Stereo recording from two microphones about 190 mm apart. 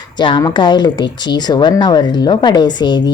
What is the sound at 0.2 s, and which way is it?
A woman's voice, 25° left (ahead or behind).